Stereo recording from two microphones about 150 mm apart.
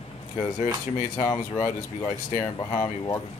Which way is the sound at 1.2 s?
20° left (ahead or behind).